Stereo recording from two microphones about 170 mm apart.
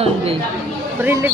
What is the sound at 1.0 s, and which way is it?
Speech, 15° right (ahead or behind).